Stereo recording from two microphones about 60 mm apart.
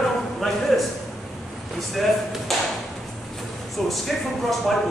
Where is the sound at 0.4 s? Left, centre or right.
Centre.